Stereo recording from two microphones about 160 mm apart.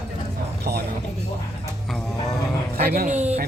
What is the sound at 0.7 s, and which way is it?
Speech, 80° right.